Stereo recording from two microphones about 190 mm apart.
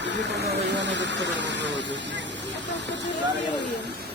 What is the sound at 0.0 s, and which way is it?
Speech, 70° right (ahead or behind).